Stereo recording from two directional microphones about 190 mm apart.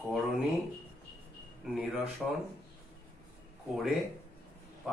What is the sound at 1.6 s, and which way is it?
Speech, centre (ahead or behind).